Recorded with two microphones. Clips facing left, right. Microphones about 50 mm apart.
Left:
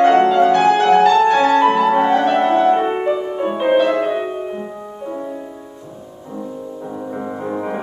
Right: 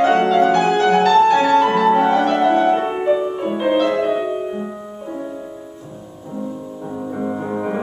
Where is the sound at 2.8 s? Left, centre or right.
Centre.